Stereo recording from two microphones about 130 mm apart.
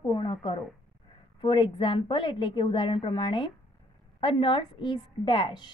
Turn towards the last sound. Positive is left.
turn(degrees=40)  # may be behind; listen again after turning